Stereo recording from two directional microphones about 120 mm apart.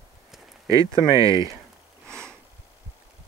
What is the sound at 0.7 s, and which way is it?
Speech, 25° right (ahead or behind).